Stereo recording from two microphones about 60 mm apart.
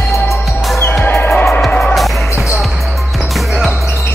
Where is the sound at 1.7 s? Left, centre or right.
Centre.